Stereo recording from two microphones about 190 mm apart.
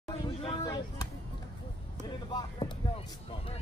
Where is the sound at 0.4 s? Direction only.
25° left (ahead or behind).